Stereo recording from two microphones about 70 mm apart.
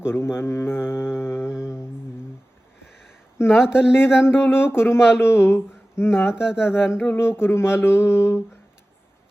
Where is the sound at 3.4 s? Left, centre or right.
Left.